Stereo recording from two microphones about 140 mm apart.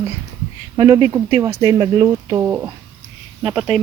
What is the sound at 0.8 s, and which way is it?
Speech, 25° right (ahead or behind).